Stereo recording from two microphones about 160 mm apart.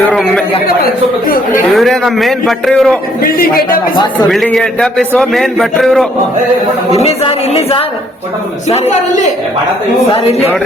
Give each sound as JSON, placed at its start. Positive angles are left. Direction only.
{"t": 0.1, "sound": "a man's voice", "side_deg": 5}
{"t": 1.7, "sound": "a man's voice", "side_deg": 0}
{"t": 3.2, "sound": "speech", "side_deg": 65}
{"t": 3.9, "sound": "speech", "side_deg": 25}
{"t": 4.3, "sound": "a man's voice", "side_deg": 0}
{"t": 6.9, "sound": "a man's voice", "side_deg": 40}